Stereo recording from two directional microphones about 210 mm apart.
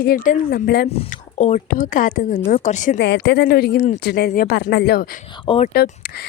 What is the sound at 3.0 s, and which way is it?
Speech, 55° left (ahead or behind).